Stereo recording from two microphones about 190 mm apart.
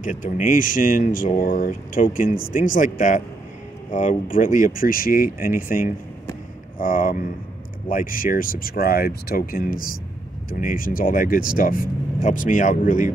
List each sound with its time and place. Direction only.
0.0 s speech: 45° left (ahead or behind)